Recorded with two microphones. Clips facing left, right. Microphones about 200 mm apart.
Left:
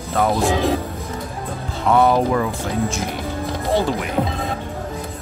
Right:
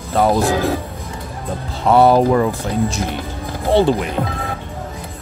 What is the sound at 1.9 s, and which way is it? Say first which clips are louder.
Speech: right 4 dB; 35° right (ahead or behind).